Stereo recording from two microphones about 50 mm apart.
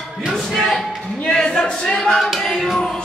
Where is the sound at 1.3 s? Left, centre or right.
Centre.